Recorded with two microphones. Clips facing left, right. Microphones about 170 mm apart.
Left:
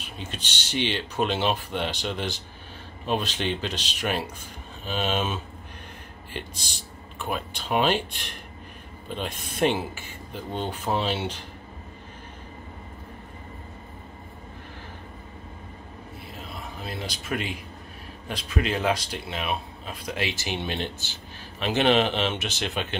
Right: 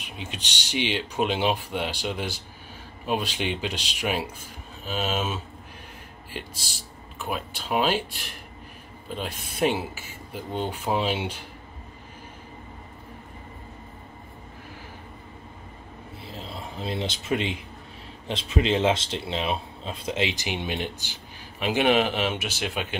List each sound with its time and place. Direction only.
0.0 s speech: 15° right (ahead or behind)
7.2 s speech: 5° right (ahead or behind)
16.3 s a sound: 30° right (ahead or behind)
18.3 s speech: 25° right (ahead or behind); by 22.9 s 10° right (ahead or behind)